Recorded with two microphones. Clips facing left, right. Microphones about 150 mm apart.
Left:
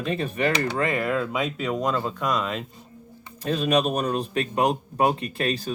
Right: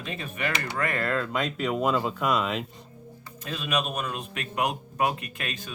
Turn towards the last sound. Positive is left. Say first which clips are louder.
# left 10 dB
turn(degrees=35)  # may be behind; listen again after turning